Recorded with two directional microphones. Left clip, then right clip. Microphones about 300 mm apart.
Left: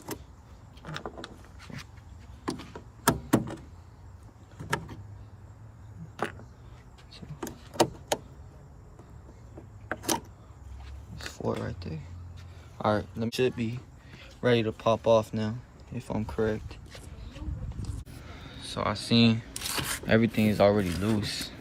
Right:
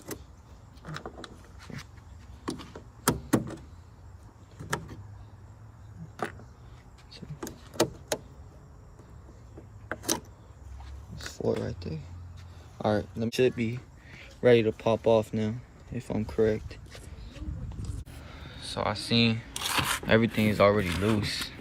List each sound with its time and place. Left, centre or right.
0.9 s a sound: centre
4.5 s vehicle: centre
7.3 s vehicle: centre
9.9 s a sound: centre
11.4 s a sound: centre
12.8 s speech: centre
13.4 s speech: centre
14.2 s a sound: centre
14.8 s speech: centre
18.4 s speech: centre
19.5 s rub: centre
20.1 s speech: centre